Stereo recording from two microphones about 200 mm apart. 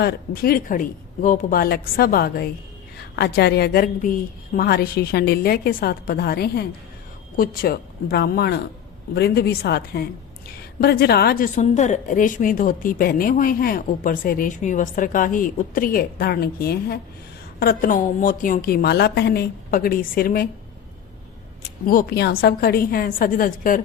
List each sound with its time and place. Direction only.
0.0 s a woman's voice: 50° left (ahead or behind)
21.8 s a woman's voice: 50° left (ahead or behind)